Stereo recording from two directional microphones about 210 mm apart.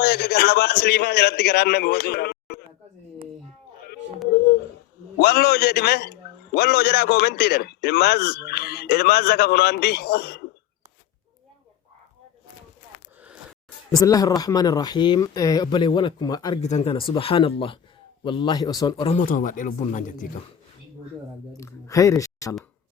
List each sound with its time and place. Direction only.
0.0 s a man's voice: 50° left (ahead or behind)
5.1 s a man's voice: 50° left (ahead or behind)
13.9 s speech: 15° left (ahead or behind)
16.6 s speech: 35° left (ahead or behind)
19.1 s speech: 40° left (ahead or behind)
21.5 s a sound: 15° left (ahead or behind)